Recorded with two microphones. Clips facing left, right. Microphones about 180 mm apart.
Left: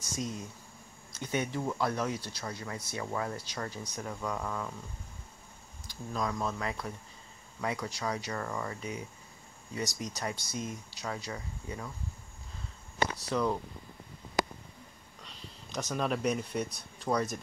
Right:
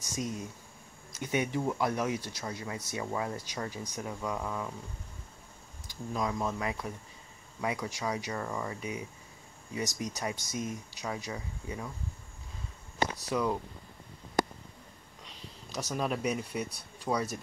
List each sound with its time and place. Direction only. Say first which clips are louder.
0.0 s speech: right 1 dB; 15° right (ahead or behind)
6.1 s speech: right 1 dB; 15° right (ahead or behind)
13.3 s speech: even; 10° right (ahead or behind)
15.7 s speech: left 1 dB; 5° right (ahead or behind)